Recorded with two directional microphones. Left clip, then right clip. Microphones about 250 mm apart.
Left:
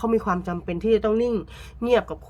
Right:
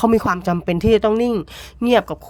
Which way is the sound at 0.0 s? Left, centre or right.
Right.